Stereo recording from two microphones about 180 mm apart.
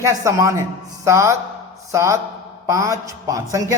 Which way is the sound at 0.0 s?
15° right (ahead or behind).